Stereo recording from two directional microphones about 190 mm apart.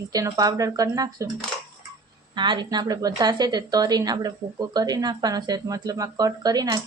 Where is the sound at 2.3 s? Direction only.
25° right (ahead or behind).